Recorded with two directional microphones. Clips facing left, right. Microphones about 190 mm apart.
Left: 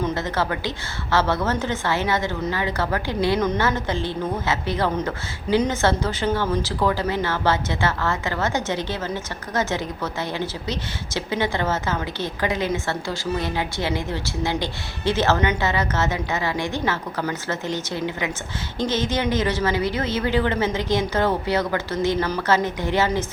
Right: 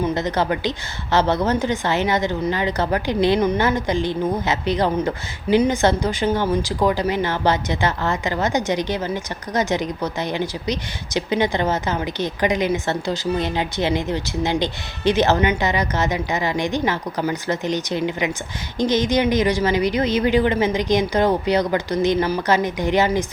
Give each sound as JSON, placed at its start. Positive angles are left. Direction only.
{"t": 0.0, "sound": "a woman's voice", "side_deg": -20}